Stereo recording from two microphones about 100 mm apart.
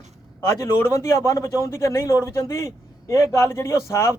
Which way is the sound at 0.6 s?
30° left (ahead or behind).